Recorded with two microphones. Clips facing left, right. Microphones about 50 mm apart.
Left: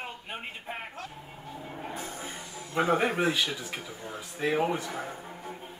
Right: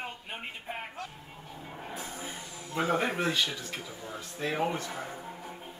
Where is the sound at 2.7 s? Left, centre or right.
Centre.